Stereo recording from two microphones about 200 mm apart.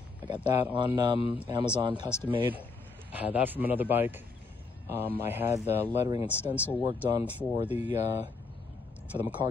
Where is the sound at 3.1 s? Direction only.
10° right (ahead or behind).